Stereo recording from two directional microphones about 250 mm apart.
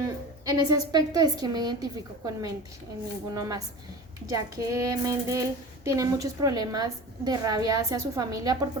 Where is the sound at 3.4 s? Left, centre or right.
Centre.